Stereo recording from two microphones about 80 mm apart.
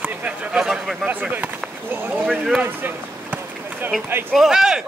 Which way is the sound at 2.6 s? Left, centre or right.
Right.